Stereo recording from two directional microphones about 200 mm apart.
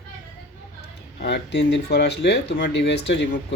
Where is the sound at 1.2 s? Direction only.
60° left (ahead or behind).